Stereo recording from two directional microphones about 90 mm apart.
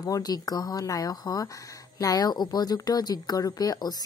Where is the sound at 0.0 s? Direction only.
45° left (ahead or behind).